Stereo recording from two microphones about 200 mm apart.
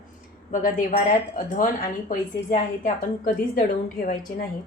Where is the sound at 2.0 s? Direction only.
40° left (ahead or behind).